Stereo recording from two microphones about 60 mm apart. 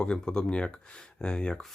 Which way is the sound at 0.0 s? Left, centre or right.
Centre.